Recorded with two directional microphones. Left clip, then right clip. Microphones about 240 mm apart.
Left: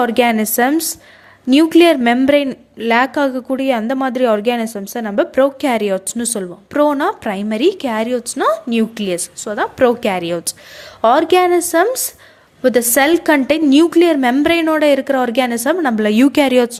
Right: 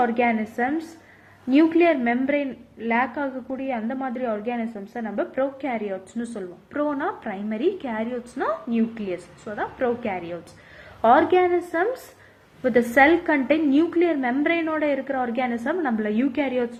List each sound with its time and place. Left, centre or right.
0.0 s a woman's voice: left